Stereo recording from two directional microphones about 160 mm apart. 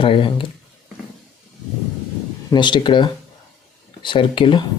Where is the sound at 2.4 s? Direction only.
30° left (ahead or behind).